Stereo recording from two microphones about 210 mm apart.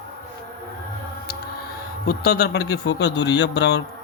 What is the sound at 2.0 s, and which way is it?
Speech, 50° left (ahead or behind).